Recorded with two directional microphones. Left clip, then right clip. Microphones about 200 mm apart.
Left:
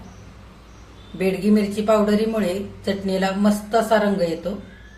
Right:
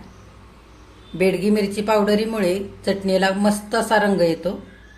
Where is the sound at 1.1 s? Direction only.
40° right (ahead or behind).